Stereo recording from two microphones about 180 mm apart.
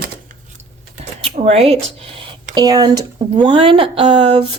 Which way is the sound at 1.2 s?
35° right (ahead or behind).